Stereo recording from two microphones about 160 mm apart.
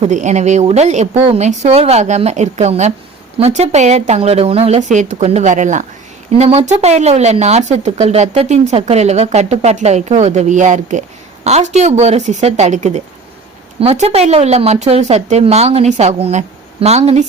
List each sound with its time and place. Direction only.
0.0 s a woman's voice: 50° right (ahead or behind)